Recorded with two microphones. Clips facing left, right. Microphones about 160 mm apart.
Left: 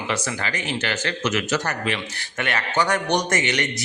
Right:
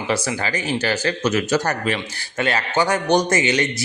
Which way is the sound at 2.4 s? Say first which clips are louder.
Right 3 dB; 30° right (ahead or behind).